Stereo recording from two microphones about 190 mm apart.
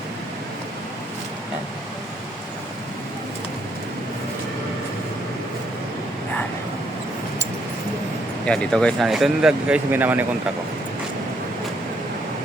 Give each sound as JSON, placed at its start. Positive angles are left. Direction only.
{"t": 8.4, "sound": "speech", "side_deg": 5}